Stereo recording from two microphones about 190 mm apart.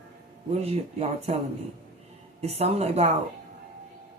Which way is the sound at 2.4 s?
35° right (ahead or behind).